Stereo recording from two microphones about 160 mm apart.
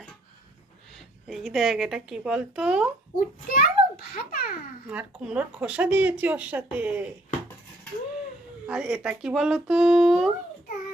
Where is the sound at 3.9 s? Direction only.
75° left (ahead or behind).